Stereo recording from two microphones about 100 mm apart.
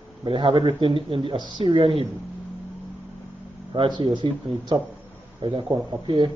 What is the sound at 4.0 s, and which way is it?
Speech, 50° right (ahead or behind).